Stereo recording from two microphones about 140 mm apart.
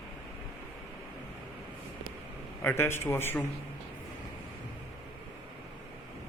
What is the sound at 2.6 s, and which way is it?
Speech, 15° left (ahead or behind).